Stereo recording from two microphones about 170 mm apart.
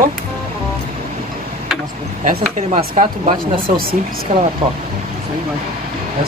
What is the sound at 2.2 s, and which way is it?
Speech, 50° right (ahead or behind).